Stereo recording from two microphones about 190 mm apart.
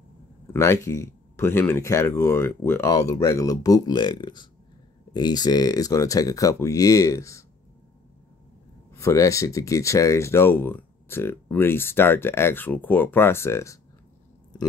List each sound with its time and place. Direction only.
0.5 s speech: 15° left (ahead or behind)
8.9 s speech: 15° left (ahead or behind)